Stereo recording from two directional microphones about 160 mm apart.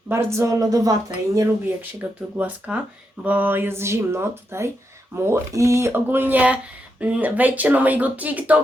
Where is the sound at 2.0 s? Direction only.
10° right (ahead or behind).